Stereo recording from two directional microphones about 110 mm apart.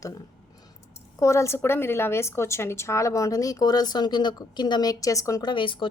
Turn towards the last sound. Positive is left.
turn(degrees=50)  # may be behind; listen again after turning